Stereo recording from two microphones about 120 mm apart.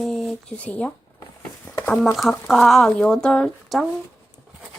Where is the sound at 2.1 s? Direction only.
Centre (ahead or behind).